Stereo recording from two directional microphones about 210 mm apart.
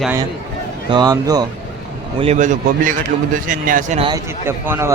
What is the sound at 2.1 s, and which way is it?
Speech, 30° right (ahead or behind).